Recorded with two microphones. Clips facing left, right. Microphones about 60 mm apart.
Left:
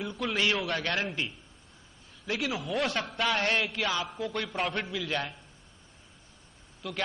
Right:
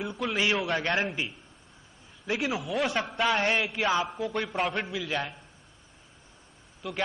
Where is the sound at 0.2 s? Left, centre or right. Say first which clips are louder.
Right 1 dB; centre.